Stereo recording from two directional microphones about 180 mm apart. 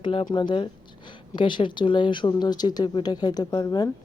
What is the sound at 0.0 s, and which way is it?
Speech, 30° left (ahead or behind).